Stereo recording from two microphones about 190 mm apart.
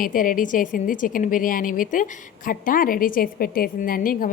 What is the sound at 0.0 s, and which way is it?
A woman's voice, 45° left (ahead or behind).